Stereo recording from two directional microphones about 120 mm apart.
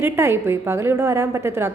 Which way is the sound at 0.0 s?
20° right (ahead or behind).